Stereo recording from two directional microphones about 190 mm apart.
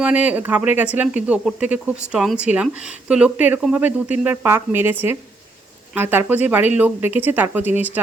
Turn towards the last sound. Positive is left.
turn(degrees=-10)  # may be behind; listen again after turning